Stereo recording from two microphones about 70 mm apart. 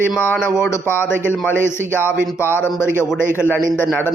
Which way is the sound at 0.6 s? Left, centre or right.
Left.